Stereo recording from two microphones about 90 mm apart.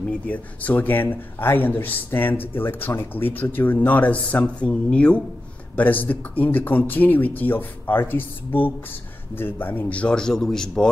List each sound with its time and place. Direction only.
0.3 s a man's voice: 20° left (ahead or behind)